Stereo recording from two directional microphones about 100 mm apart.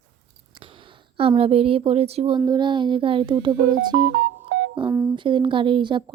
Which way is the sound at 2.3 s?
45° right (ahead or behind).